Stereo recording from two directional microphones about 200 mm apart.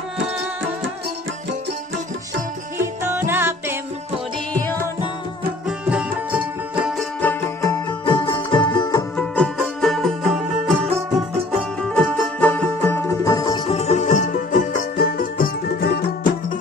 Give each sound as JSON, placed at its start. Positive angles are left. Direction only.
{"t": 3.0, "sound": "music", "side_deg": -10}
{"t": 4.6, "sound": "music", "side_deg": 10}
{"t": 5.7, "sound": "music", "side_deg": -5}
{"t": 7.2, "sound": "music", "side_deg": 10}
{"t": 8.0, "sound": "music", "side_deg": 25}
{"t": 9.1, "sound": "music", "side_deg": 5}
{"t": 13.7, "sound": "music", "side_deg": 35}